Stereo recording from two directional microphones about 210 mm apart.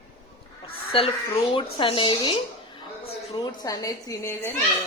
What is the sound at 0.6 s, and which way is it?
Speech, 25° left (ahead or behind).